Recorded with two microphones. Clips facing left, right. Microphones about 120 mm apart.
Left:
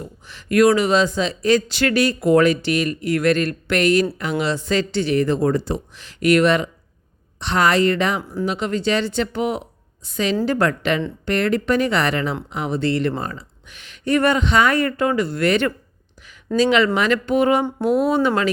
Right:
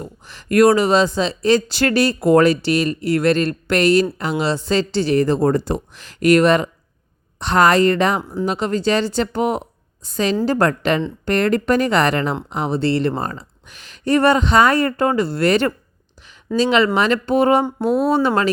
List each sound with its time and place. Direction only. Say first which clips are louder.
0.0 s speech: right 2 dB; 40° right (ahead or behind)